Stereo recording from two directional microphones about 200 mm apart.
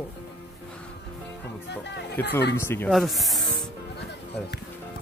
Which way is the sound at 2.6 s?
10° left (ahead or behind).